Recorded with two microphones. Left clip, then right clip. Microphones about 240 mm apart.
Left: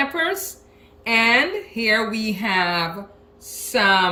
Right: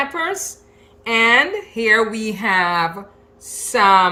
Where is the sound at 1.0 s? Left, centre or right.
Centre.